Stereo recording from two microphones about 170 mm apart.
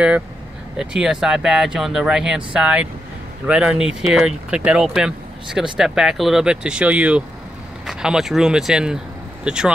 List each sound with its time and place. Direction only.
0.7 s speech: 5° right (ahead or behind)